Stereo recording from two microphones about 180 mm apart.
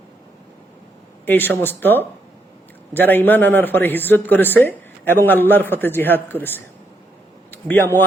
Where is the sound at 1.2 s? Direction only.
10° left (ahead or behind).